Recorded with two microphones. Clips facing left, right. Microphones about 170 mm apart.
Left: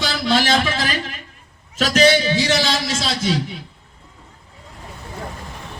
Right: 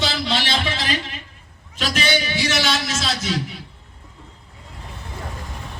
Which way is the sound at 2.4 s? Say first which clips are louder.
Left 3 dB; 20° left (ahead or behind).